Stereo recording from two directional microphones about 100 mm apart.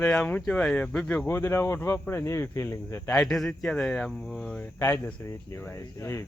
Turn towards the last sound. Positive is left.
turn(degrees=30)  # may be behind; listen again after turning